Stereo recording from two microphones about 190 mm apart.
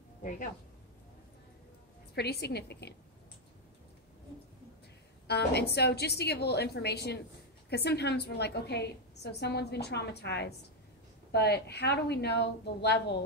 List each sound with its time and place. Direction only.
0.2 s speech: 45° left (ahead or behind)
2.1 s a woman's voice: 60° left (ahead or behind)
5.3 s a woman's voice: 60° left (ahead or behind)